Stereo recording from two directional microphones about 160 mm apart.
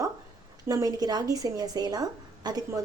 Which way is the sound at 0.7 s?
25° right (ahead or behind).